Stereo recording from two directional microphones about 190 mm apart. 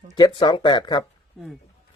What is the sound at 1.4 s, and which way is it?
Speech, centre (ahead or behind).